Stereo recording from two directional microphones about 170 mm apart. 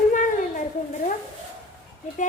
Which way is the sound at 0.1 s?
50° left (ahead or behind).